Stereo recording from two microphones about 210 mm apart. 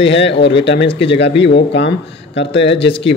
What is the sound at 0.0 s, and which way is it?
Speech, 55° left (ahead or behind).